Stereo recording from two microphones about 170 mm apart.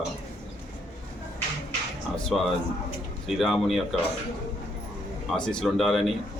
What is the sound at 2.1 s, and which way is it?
A man's voice, centre (ahead or behind).